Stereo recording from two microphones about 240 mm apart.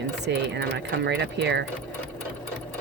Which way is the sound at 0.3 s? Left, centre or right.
Right.